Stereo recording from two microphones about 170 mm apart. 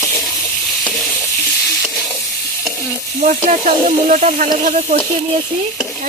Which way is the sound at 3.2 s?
45° right (ahead or behind).